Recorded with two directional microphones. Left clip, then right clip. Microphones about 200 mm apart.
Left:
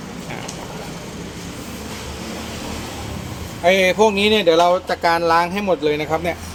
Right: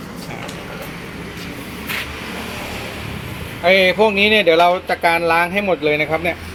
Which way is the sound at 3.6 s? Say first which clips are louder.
Right 1 dB; 10° left (ahead or behind).